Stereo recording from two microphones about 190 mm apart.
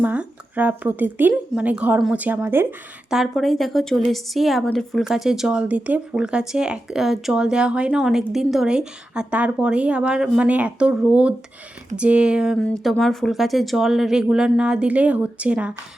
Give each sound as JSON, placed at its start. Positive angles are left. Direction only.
{"t": 0.0, "sound": "speech", "side_deg": -10}